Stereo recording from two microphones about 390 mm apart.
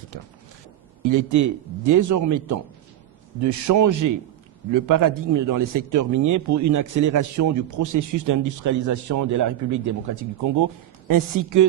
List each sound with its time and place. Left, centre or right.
1.0 s a man's voice: right